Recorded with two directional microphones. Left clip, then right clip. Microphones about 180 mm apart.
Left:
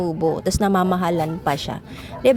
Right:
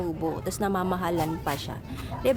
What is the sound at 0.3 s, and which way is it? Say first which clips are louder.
A woman's voice: left 9 dB; 35° left (ahead or behind).